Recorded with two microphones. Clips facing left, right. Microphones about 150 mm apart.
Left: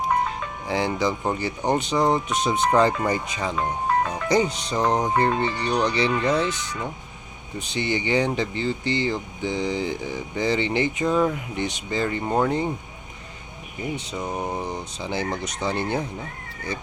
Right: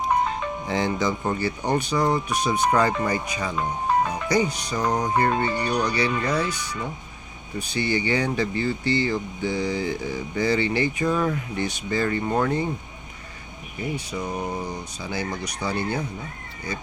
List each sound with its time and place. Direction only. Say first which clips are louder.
0.7 s speech: left 1 dB; 10° left (ahead or behind)
13.9 s speech: even; 20° left (ahead or behind)